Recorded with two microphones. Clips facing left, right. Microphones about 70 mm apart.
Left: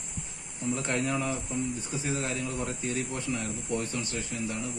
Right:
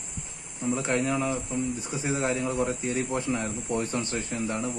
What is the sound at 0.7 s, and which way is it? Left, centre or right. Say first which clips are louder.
Speech: right 3 dB; centre.